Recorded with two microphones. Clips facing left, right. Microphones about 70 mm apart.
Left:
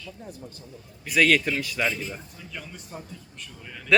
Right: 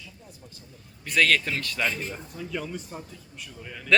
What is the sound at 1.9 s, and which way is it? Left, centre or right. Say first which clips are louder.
Speech: left 1 dB; right.